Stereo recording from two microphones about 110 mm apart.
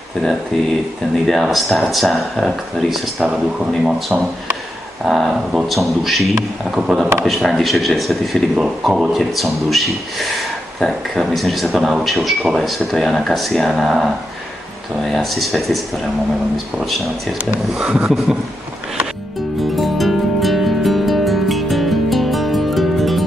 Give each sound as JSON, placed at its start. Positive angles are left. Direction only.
{"t": 1.2, "sound": "speech", "side_deg": 0}
{"t": 17.5, "sound": "speech", "side_deg": -10}
{"t": 19.8, "sound": "music", "side_deg": 0}